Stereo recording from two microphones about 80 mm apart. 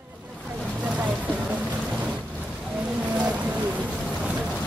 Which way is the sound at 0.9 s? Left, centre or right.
Centre.